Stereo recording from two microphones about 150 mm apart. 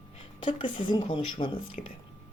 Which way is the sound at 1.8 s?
55° left (ahead or behind).